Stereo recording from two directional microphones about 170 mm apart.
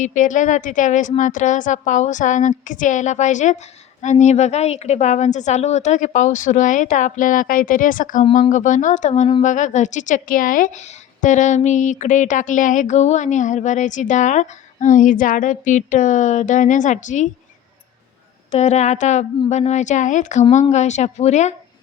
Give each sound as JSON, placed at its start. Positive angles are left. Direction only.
{"t": 0.0, "sound": "a woman's voice", "side_deg": 45}
{"t": 18.5, "sound": "a woman's voice", "side_deg": 40}